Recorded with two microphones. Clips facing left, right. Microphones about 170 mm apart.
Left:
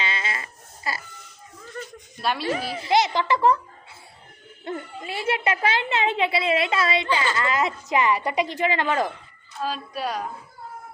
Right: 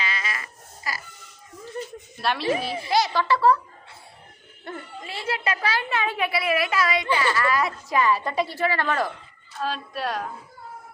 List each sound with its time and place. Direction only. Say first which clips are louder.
0.0 s a sound: left 2 dB; 25° left (ahead or behind)
2.4 s a child's voice: right 2 dB; 25° right (ahead or behind)
2.9 s a woman's voice: left 1 dB; 20° left (ahead or behind)
4.7 s a woman's voice: left 4 dB; 20° left (ahead or behind)
9.6 s a woman's voice: even; centre (ahead or behind)